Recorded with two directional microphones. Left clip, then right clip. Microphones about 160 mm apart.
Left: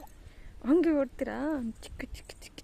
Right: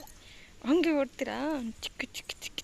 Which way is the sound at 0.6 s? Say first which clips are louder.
Left 1 dB; 25° left (ahead or behind).